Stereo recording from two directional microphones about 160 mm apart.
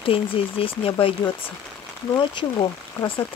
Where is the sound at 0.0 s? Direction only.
35° left (ahead or behind).